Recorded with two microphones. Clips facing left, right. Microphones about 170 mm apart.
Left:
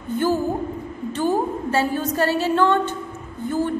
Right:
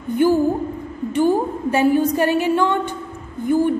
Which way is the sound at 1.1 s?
15° right (ahead or behind).